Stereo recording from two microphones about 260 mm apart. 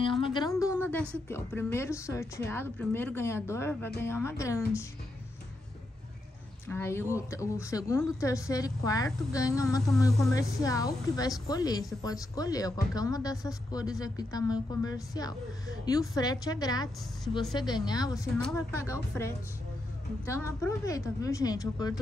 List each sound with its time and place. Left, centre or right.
0.0 s a sound: centre
1.3 s speech: centre
6.7 s speech: centre